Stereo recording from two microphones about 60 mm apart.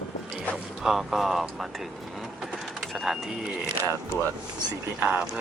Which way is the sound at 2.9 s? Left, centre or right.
Centre.